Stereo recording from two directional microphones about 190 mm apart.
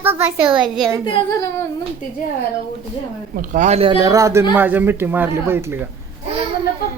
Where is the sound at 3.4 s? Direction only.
40° right (ahead or behind).